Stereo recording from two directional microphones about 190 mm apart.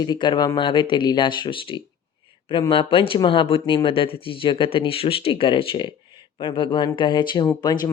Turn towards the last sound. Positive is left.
turn(degrees=20)  # may be behind; listen again after turning